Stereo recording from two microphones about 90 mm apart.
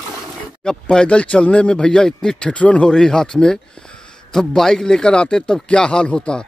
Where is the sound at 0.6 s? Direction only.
10° left (ahead or behind).